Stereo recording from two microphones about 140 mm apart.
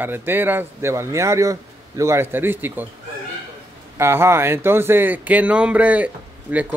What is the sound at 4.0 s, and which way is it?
Speech, 15° right (ahead or behind).